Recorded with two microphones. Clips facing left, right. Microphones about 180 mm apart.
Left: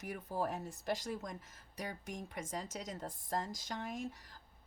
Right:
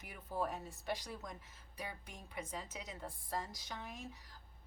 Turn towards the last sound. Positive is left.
turn(degrees=45)  # may be behind; listen again after turning